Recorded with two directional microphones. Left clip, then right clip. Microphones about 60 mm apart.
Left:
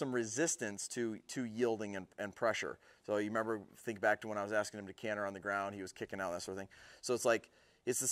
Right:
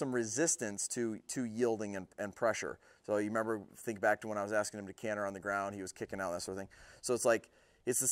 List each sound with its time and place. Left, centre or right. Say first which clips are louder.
0.0 s speech: right 2 dB; right